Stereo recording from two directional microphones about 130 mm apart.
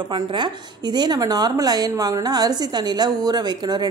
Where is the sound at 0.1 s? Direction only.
35° right (ahead or behind).